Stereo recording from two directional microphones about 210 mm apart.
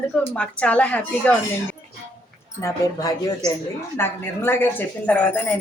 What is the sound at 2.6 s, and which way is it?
A woman's voice, 15° left (ahead or behind).